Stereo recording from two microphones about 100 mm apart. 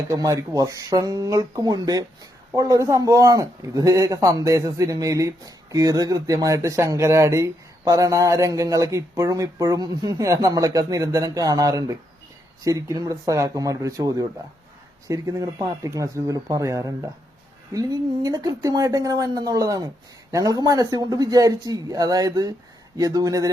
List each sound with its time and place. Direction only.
0.1 s a man's voice: 35° right (ahead or behind)